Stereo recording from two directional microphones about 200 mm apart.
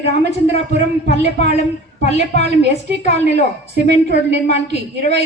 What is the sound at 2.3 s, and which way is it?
A woman's voice, 35° left (ahead or behind).